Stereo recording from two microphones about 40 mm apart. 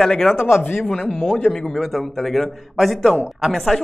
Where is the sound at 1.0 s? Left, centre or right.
Centre.